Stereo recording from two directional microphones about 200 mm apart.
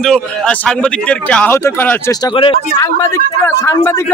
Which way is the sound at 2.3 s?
25° left (ahead or behind).